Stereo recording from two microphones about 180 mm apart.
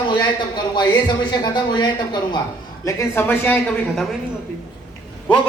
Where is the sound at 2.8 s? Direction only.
15° left (ahead or behind).